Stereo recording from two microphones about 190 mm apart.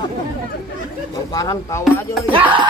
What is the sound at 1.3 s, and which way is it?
Speech, 20° left (ahead or behind).